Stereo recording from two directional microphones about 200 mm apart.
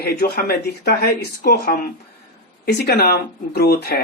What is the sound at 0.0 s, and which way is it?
Speech, 50° left (ahead or behind).